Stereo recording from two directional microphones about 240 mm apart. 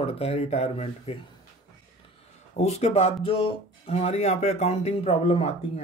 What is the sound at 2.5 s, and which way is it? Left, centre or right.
Speech, left.